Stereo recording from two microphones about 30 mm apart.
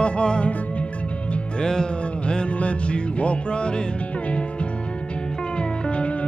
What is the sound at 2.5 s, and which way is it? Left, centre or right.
Music, left.